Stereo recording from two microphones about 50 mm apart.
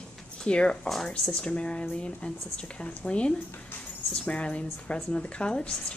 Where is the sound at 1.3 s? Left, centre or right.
Left.